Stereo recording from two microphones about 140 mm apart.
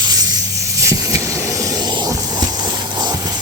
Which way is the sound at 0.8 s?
20° right (ahead or behind).